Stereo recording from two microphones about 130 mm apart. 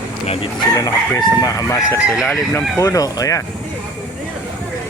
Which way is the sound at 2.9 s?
25° left (ahead or behind).